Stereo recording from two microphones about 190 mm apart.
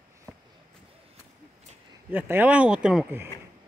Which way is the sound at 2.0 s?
10° right (ahead or behind).